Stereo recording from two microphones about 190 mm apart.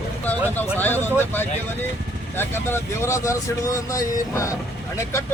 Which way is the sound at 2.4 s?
15° left (ahead or behind).